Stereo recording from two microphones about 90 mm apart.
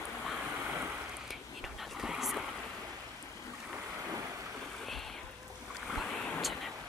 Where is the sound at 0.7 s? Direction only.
20° right (ahead or behind).